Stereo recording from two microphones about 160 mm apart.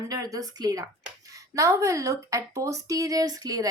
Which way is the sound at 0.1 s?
20° right (ahead or behind).